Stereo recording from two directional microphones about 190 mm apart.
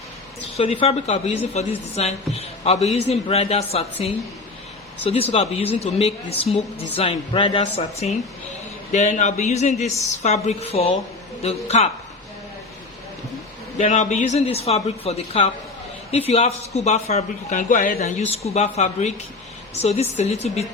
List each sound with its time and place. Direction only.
0.5 s a man's voice: 30° left (ahead or behind)
5.0 s a man's voice: 30° left (ahead or behind)
13.7 s a man's voice: 35° left (ahead or behind)